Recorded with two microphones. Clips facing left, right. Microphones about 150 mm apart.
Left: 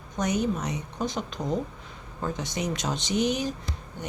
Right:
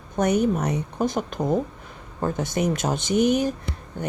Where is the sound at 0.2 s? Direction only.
55° right (ahead or behind).